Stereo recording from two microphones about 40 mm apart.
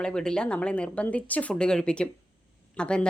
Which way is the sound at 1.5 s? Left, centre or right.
Centre.